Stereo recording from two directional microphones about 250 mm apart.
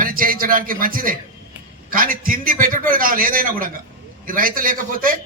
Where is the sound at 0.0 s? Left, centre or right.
Right.